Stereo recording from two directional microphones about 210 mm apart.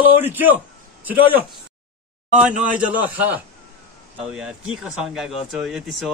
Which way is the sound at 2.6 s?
5° right (ahead or behind).